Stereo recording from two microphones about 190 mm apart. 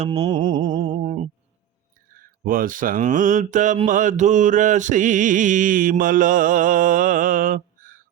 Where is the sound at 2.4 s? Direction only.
50° right (ahead or behind).